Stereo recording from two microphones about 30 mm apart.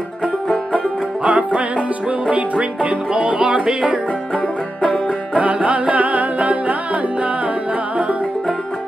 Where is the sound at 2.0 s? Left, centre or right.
Right.